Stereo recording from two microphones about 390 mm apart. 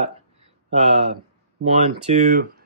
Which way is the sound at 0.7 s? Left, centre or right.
Centre.